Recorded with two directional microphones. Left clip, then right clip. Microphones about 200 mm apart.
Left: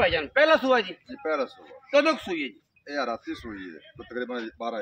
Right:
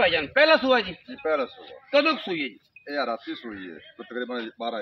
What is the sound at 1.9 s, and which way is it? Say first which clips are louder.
A man's voice: even; 10° left (ahead or behind).